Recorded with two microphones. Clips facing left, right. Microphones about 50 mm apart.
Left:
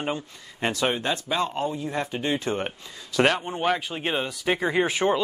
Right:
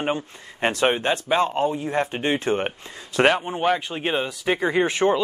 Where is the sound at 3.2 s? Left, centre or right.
Centre.